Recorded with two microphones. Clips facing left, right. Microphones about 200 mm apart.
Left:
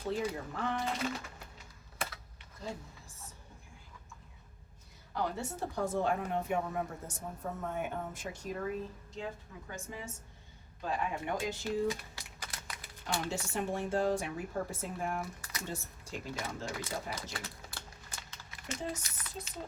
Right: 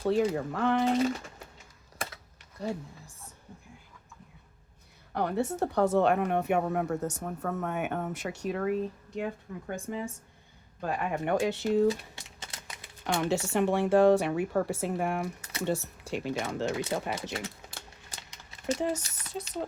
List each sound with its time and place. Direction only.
0.0 s a woman's voice: 75° right (ahead or behind)
5.1 s a woman's voice: 60° right (ahead or behind)
11.9 s typewriter: 25° right (ahead or behind)
13.3 s a woman's voice: 75° right (ahead or behind)
18.6 s speech: 70° right (ahead or behind)